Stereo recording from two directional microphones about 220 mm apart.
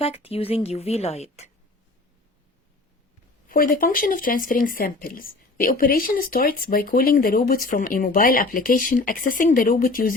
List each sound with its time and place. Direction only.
0.0 s a woman's voice: 25° left (ahead or behind)
3.5 s speech: 40° left (ahead or behind)